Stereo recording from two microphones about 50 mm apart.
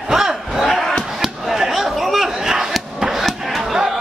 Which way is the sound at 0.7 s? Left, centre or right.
Centre.